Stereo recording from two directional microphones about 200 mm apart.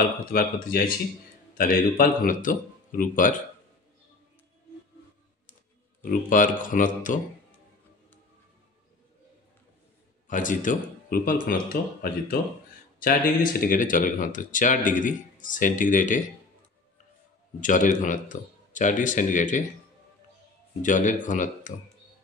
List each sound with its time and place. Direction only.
0.3 s speech: 45° left (ahead or behind)
6.0 s speech: 40° left (ahead or behind)
10.2 s speech: 40° left (ahead or behind)
17.6 s speech: 40° left (ahead or behind)
20.8 s speech: 40° left (ahead or behind)